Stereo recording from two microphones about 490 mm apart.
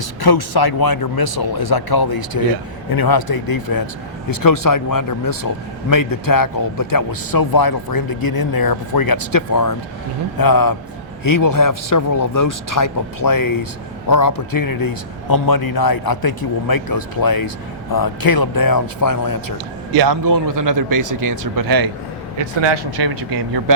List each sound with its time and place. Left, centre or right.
0.2 s a man's voice: left
19.9 s a man's voice: right
23.0 s a man's voice: right